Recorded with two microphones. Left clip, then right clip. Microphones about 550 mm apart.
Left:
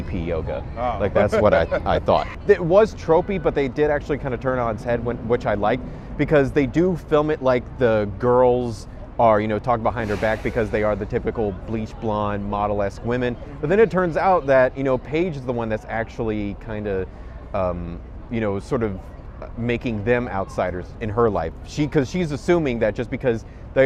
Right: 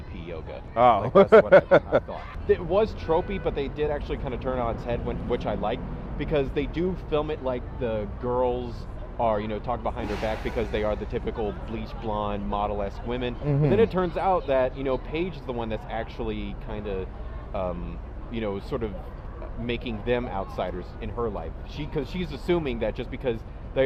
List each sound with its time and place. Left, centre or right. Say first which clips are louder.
0.2 s speech: left 11 dB; centre
1.1 s speech: right 1 dB; right
2.0 s speech: left 9 dB; left